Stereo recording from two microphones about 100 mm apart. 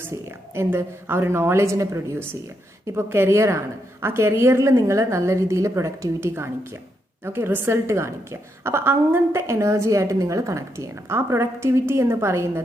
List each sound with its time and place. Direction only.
0.0 s a woman's voice: 25° right (ahead or behind)